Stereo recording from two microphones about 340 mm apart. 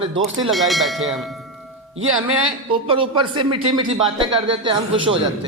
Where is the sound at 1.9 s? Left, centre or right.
Right.